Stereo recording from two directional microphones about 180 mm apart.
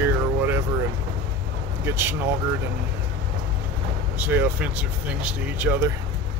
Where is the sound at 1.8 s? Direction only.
10° right (ahead or behind).